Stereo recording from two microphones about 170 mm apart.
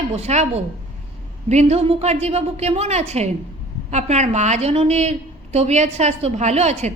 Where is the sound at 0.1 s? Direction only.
40° right (ahead or behind).